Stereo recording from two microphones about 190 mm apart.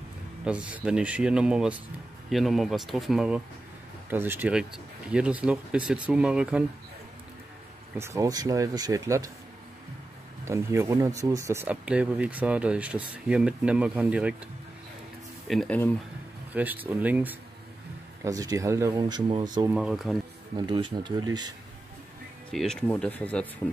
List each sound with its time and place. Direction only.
0.5 s speech: 5° right (ahead or behind)
8.0 s speech: 15° right (ahead or behind)
10.4 s speech: 15° right (ahead or behind)
15.4 s speech: centre (ahead or behind)
16.5 s speech: 10° right (ahead or behind)
19.7 s speech: 5° right (ahead or behind)
20.5 s speech: 25° right (ahead or behind)
22.5 s speech: 5° left (ahead or behind)